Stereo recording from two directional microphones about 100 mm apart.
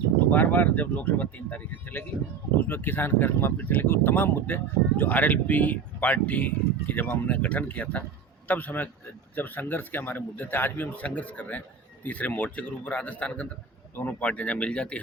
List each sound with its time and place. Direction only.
0.3 s a man's voice: 15° left (ahead or behind)